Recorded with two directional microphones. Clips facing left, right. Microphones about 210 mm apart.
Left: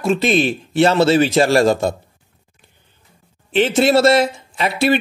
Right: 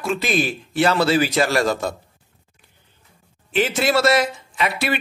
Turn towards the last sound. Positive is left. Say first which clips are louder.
# left 6 dB
turn(degrees=25)  # may be behind; listen again after turning